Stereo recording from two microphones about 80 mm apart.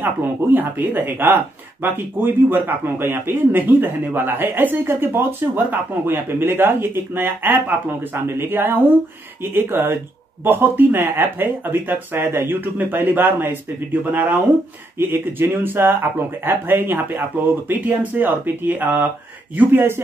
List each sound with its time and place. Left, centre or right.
0.0 s speech: right